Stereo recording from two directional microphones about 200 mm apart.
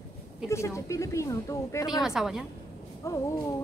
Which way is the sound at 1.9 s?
Centre (ahead or behind).